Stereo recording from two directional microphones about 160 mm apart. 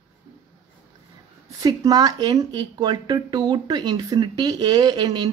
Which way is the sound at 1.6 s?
25° right (ahead or behind).